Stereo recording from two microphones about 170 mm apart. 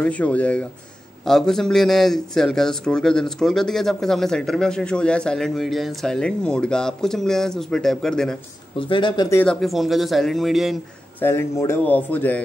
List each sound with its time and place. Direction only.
0.0 s a man's voice: 10° left (ahead or behind)
8.7 s speech: 30° left (ahead or behind)
9.3 s a man's voice: 10° left (ahead or behind)
11.1 s speech: 15° left (ahead or behind)